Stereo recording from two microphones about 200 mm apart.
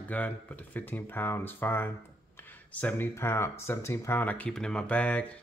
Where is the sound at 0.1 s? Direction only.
10° left (ahead or behind).